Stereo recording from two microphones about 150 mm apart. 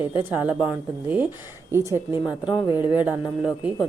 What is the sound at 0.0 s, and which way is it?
A woman's voice, 15° right (ahead or behind).